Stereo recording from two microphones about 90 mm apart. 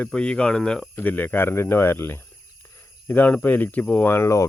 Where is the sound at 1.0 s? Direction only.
20° left (ahead or behind).